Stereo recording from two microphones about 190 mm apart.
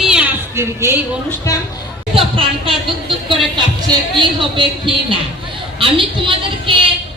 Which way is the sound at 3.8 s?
25° right (ahead or behind).